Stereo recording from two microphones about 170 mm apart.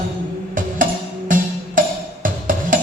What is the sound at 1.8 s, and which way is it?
Music, 55° right (ahead or behind).